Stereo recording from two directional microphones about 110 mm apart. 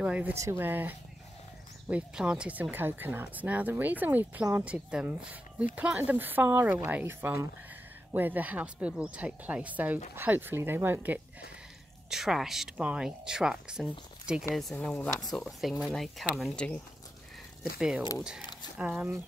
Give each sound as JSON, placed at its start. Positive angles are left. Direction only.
{"t": 0.0, "sound": "speech", "side_deg": -10}
{"t": 0.3, "sound": "speech", "side_deg": -25}
{"t": 12.1, "sound": "speech", "side_deg": -5}
{"t": 14.5, "sound": "speech", "side_deg": 5}
{"t": 17.7, "sound": "speech", "side_deg": -5}